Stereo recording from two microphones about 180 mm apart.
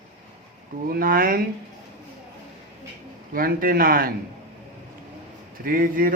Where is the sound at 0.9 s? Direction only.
55° right (ahead or behind).